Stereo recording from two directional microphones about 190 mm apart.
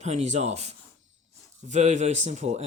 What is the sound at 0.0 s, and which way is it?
Speech, 35° right (ahead or behind).